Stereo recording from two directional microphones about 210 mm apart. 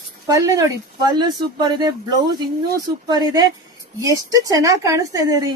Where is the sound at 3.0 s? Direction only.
20° right (ahead or behind).